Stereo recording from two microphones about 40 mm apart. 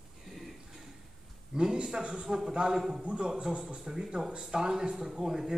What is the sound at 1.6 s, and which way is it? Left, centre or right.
A man's voice, right.